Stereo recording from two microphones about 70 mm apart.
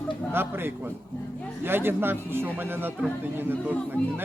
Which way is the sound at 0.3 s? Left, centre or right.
Right.